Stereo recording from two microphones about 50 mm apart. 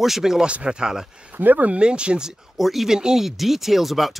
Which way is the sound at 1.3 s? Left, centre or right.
Right.